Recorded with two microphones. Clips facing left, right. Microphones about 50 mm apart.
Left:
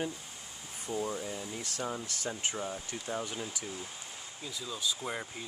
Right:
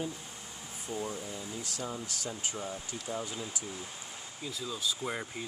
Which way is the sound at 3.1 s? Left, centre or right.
Left.